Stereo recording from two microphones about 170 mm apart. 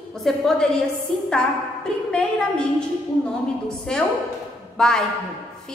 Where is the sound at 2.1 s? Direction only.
5° left (ahead or behind).